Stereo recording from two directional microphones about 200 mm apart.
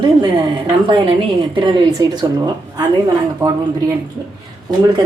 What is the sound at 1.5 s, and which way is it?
A woman's voice, 25° right (ahead or behind).